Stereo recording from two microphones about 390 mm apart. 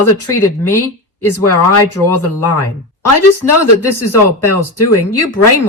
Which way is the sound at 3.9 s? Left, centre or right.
Left.